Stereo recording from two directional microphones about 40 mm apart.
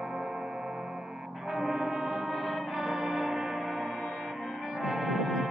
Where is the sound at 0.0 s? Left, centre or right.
Centre.